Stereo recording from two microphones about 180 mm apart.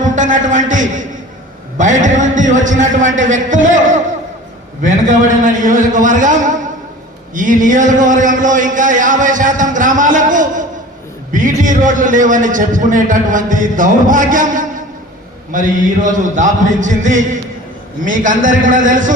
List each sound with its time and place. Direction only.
0.0 s a man's voice: 45° right (ahead or behind)
4.9 s a man's voice: 45° right (ahead or behind)